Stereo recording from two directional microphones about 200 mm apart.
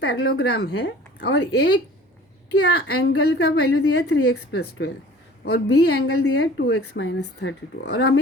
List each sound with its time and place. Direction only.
0.0 s a woman's voice: 55° left (ahead or behind); by 3.8 s 75° left (ahead or behind)
4.0 s a woman's voice: 55° left (ahead or behind)
6.8 s a woman's voice: 90° left
7.2 s a woman's voice: 55° left (ahead or behind)